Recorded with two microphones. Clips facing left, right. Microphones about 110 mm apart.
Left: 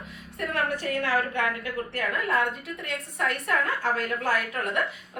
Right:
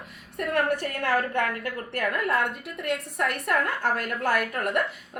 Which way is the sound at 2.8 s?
60° right (ahead or behind).